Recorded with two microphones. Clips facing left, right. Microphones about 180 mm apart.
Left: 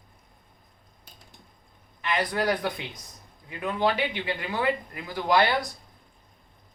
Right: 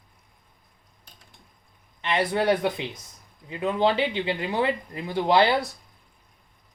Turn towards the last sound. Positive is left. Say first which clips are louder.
# right 3 dB
turn(degrees=-25)  # may be behind; listen again after turning